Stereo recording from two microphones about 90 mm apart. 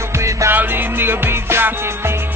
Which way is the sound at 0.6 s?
20° right (ahead or behind).